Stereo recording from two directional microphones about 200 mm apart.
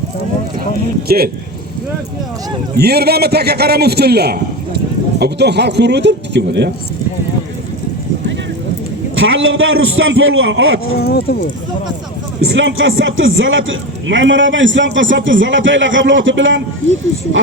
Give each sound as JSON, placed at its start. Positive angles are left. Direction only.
{"t": 1.0, "sound": "a man's voice", "side_deg": -50}
{"t": 2.7, "sound": "a man's voice", "side_deg": -50}
{"t": 9.2, "sound": "a man's voice", "side_deg": -75}
{"t": 11.0, "sound": "speech", "side_deg": 50}
{"t": 12.4, "sound": "a man's voice", "side_deg": -75}